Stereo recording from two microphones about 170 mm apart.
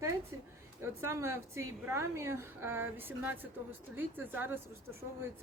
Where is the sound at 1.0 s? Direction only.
15° right (ahead or behind).